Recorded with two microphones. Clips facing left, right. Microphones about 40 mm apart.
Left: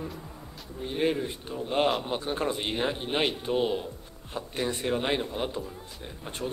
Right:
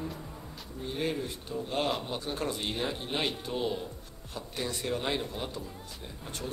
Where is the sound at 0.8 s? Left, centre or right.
Left.